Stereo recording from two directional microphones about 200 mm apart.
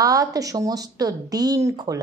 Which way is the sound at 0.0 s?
15° right (ahead or behind).